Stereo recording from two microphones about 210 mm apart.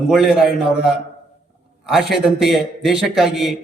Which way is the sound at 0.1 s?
Centre (ahead or behind).